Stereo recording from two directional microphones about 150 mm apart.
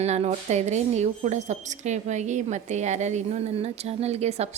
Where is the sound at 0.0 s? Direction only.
45° right (ahead or behind).